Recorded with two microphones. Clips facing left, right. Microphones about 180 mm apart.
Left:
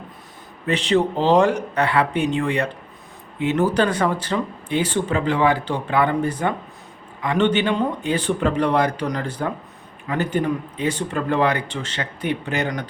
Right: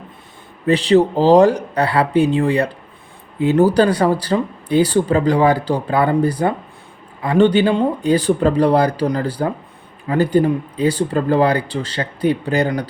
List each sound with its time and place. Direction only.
0.7 s speech: 35° right (ahead or behind)